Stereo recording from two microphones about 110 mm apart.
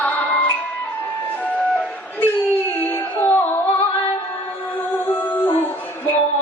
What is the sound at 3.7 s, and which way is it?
Music, 50° left (ahead or behind).